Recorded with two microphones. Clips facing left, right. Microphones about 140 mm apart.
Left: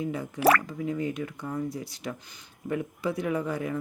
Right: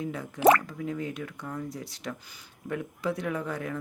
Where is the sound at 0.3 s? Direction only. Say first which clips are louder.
Right 2 dB; 25° right (ahead or behind).